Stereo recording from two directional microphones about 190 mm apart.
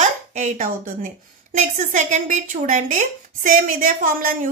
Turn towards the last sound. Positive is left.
turn(degrees=-45)  # may be behind; listen again after turning